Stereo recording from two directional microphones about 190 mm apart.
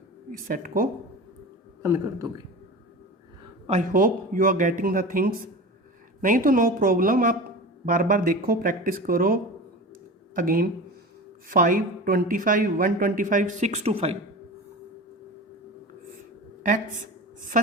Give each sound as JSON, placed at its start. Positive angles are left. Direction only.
{"t": 0.3, "sound": "a woman's voice", "side_deg": -45}
{"t": 1.8, "sound": "a man's voice", "side_deg": -15}
{"t": 3.7, "sound": "a woman's voice", "side_deg": -45}